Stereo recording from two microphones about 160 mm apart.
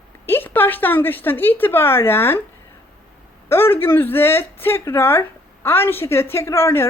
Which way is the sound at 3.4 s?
15° left (ahead or behind).